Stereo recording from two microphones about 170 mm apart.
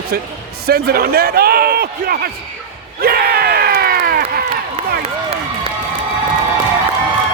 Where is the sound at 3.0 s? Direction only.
65° right (ahead or behind).